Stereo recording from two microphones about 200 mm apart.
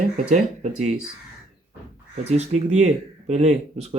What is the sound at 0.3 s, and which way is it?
Speech, 40° right (ahead or behind).